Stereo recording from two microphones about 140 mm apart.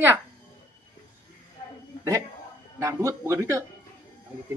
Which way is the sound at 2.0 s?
20° right (ahead or behind).